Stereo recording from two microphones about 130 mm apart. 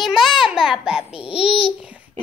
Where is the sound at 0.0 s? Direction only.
Centre (ahead or behind).